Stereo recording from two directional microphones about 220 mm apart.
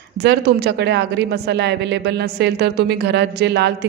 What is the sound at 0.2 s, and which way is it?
A woman's voice, 50° right (ahead or behind).